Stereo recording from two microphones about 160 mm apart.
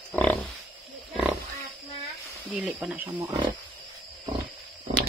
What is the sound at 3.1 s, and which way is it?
Speech, 25° right (ahead or behind).